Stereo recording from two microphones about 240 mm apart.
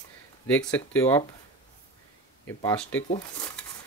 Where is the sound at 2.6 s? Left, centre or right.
Centre.